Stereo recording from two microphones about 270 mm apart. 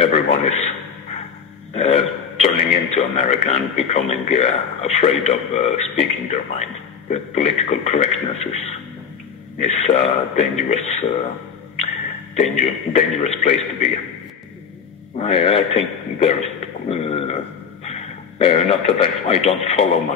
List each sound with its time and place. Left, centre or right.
0.0 s a sound: left
1.7 s a man's voice: left
12.4 s speech: left
15.1 s speech: left
16.9 s a sound: left
17.8 s a man's voice: left